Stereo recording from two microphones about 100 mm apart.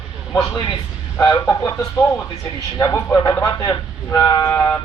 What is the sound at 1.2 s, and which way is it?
Speech, 35° left (ahead or behind).